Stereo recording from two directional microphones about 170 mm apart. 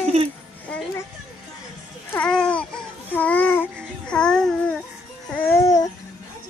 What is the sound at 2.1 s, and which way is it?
Babbling, 5° left (ahead or behind).